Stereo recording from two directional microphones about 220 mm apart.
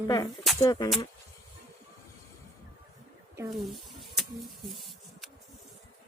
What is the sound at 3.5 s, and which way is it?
Bird, centre (ahead or behind).